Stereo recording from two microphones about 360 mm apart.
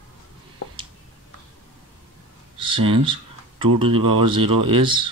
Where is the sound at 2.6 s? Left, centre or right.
Right.